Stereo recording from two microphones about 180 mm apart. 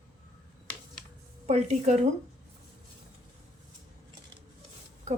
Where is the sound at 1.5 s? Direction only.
40° right (ahead or behind).